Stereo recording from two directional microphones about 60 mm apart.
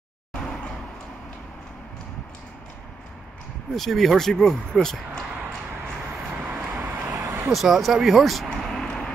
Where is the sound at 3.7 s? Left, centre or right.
Centre.